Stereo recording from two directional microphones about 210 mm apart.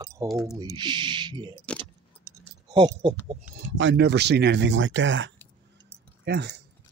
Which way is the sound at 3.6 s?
60° right (ahead or behind).